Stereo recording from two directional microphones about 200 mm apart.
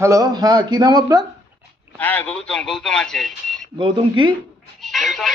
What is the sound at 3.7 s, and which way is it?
Speech, 25° right (ahead or behind).